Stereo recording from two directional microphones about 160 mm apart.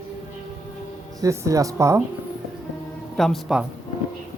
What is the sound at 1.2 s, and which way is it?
Speech, 20° right (ahead or behind).